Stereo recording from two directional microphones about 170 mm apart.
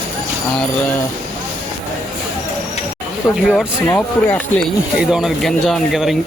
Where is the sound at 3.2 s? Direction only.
15° left (ahead or behind).